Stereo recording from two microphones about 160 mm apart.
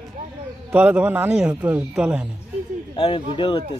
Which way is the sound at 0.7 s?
10° right (ahead or behind).